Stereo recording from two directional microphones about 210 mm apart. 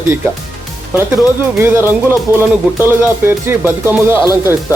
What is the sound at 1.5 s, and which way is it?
Speech, 10° right (ahead or behind).